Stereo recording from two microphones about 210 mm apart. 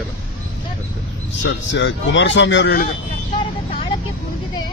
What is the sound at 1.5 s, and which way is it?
Speech, 60° left (ahead or behind).